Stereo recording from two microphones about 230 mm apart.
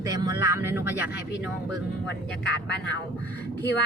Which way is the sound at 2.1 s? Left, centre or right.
Left.